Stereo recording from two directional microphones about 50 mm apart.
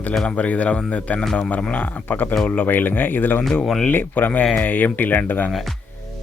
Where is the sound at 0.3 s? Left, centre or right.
Left.